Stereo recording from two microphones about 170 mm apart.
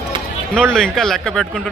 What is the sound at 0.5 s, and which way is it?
A man's voice, 5° left (ahead or behind).